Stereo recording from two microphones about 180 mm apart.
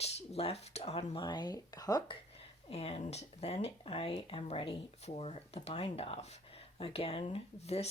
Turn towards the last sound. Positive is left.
turn(degrees=35)  # may be behind; listen again after turning